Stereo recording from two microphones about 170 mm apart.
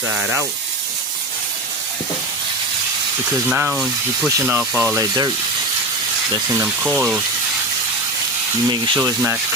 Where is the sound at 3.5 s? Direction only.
10° right (ahead or behind).